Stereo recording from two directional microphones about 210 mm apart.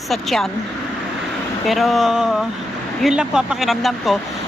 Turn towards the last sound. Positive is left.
turn(degrees=0)  # may be behind; listen again after turning